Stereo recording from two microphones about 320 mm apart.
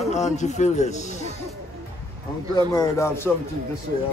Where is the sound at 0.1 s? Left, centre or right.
Left.